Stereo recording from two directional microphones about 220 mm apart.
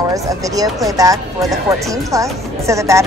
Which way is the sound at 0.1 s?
15° right (ahead or behind).